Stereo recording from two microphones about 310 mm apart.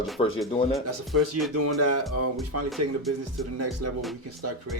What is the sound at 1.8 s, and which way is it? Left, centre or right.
Speech, right.